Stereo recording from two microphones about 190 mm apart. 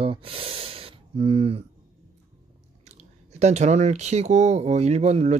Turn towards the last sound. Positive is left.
turn(degrees=-35)  # may be behind; listen again after turning